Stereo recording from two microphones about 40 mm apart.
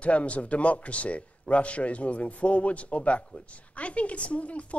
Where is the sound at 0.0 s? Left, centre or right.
Left.